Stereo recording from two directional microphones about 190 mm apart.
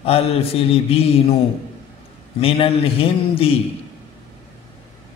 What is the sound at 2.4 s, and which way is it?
A man's voice, 30° left (ahead or behind).